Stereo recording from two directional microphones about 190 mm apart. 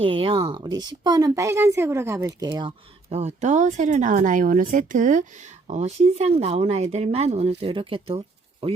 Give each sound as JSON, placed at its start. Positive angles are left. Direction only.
{"t": 0.0, "sound": "speech", "side_deg": -30}